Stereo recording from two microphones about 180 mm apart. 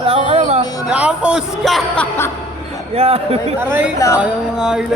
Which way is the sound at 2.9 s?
35° right (ahead or behind).